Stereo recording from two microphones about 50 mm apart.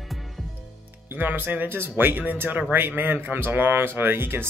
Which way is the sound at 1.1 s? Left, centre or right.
Right.